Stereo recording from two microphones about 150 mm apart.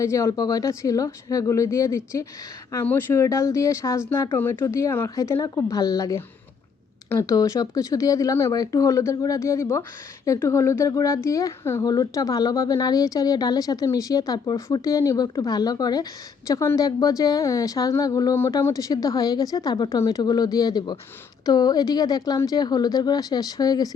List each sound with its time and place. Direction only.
0.0 s a woman's voice: 20° left (ahead or behind)